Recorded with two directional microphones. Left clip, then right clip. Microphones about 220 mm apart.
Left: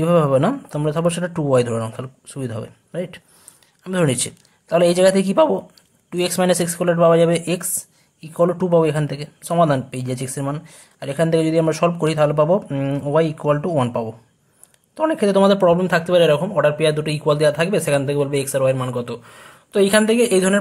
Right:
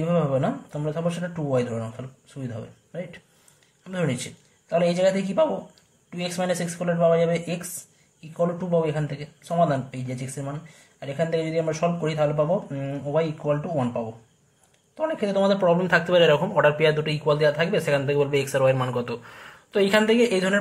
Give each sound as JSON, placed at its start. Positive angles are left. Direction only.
{"t": 0.0, "sound": "a man's voice", "side_deg": 40}